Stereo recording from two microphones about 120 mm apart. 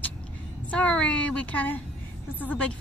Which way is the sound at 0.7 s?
10° left (ahead or behind).